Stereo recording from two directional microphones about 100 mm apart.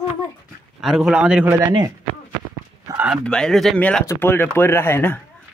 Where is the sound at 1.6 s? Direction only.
45° right (ahead or behind).